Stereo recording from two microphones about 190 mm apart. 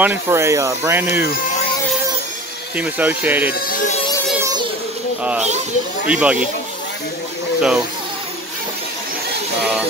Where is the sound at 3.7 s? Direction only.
40° left (ahead or behind).